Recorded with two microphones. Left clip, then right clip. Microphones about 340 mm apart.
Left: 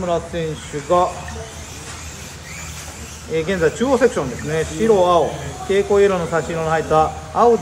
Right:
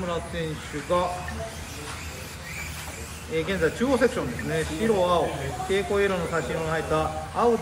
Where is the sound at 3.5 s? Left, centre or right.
Centre.